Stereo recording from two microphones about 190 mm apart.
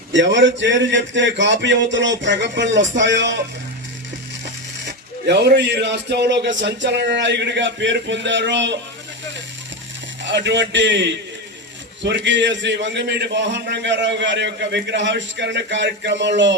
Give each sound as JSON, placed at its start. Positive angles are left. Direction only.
{"t": 0.1, "sound": "a man's voice", "side_deg": -70}
{"t": 4.9, "sound": "a man's voice", "side_deg": -65}
{"t": 10.2, "sound": "a man's voice", "side_deg": -70}